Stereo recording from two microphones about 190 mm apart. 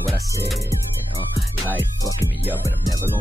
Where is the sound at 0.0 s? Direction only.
Centre (ahead or behind).